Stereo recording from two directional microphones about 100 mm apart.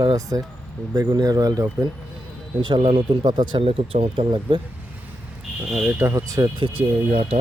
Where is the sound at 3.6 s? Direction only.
65° right (ahead or behind).